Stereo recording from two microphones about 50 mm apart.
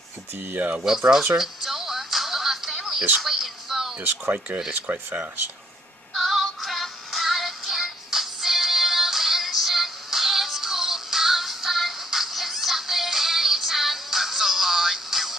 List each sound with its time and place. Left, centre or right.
0.4 s speech: right
0.9 s speech: centre
1.4 s music: centre
3.2 s a sound: centre
4.0 s speech: right
6.1 s music: centre